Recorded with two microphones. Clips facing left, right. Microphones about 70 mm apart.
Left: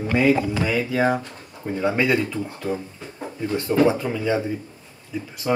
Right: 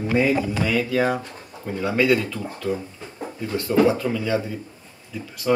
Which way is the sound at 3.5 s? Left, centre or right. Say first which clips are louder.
Even; left.